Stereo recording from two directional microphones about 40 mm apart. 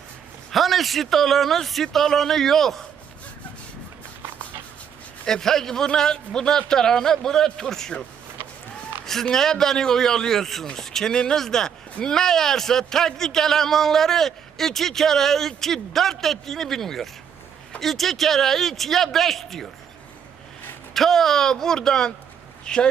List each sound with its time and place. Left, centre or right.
0.5 s speech: centre
5.2 s a man's voice: centre
9.3 s a man's voice: centre
20.9 s a man's voice: centre